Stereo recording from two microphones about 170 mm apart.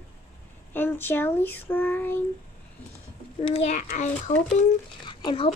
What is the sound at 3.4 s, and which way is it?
Speech, 40° left (ahead or behind).